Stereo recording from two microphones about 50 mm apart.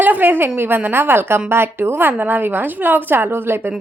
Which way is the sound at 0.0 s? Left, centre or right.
Right.